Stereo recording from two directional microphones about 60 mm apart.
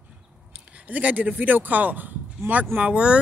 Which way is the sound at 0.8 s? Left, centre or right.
Right.